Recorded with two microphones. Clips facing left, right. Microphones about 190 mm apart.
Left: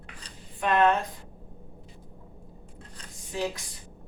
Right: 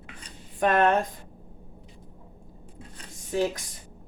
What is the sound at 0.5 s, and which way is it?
Speech, 45° right (ahead or behind).